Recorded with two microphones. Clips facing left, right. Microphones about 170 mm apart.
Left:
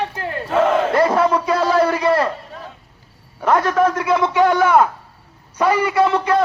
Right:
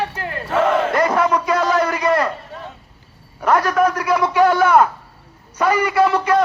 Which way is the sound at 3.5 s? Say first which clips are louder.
Even; 25° left (ahead or behind).